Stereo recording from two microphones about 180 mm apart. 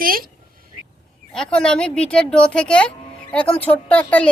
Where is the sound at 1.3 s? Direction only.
5° left (ahead or behind).